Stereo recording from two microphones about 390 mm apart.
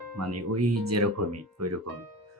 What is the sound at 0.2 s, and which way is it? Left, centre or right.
Speech, right.